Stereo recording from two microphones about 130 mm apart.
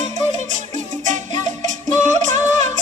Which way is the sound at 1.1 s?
70° right (ahead or behind).